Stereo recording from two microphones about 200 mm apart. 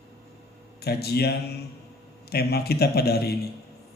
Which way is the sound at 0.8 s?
50° left (ahead or behind).